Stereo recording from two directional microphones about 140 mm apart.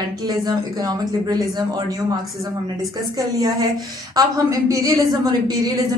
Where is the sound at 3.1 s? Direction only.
25° right (ahead or behind).